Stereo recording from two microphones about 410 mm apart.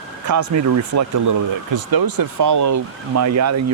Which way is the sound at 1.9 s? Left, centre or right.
Right.